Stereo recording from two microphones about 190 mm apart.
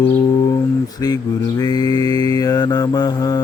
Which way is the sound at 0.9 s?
20° left (ahead or behind).